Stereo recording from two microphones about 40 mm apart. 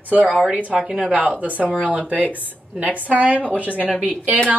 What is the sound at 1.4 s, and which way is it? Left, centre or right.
A woman's voice, right.